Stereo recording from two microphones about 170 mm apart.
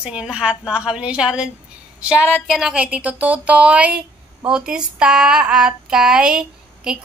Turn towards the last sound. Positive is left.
turn(degrees=-5)  # may be behind; listen again after turning